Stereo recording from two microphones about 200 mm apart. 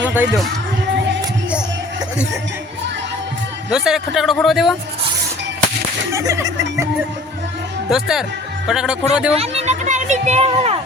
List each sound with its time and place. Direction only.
0.0 s a sound: 10° right (ahead or behind)
3.7 s a man's voice: 5° right (ahead or behind)
6.1 s speech: 15° right (ahead or behind)
7.9 s a man's voice: centre (ahead or behind)
9.3 s speech: 30° right (ahead or behind)